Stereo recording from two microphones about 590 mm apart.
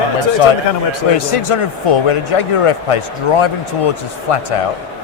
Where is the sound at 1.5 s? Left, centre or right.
Left.